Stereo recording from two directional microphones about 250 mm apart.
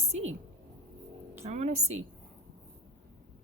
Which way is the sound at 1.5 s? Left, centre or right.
Right.